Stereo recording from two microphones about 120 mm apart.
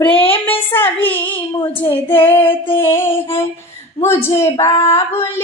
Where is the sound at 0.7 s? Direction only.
15° left (ahead or behind).